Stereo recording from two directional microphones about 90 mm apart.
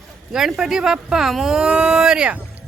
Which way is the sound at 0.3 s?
5° right (ahead or behind).